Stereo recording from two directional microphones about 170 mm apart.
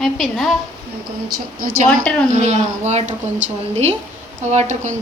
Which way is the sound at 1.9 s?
5° left (ahead or behind).